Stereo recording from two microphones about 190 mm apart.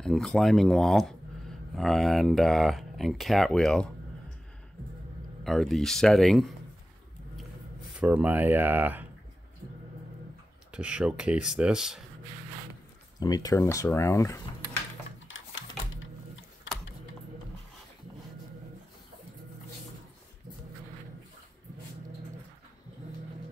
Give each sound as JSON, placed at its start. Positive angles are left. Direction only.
{"t": 0.0, "sound": "speech", "side_deg": 0}
{"t": 5.4, "sound": "speech", "side_deg": 0}
{"t": 8.0, "sound": "speech", "side_deg": -5}
{"t": 10.7, "sound": "speech", "side_deg": -5}
{"t": 13.2, "sound": "speech", "side_deg": 20}
{"t": 15.2, "sound": "a sound", "side_deg": 90}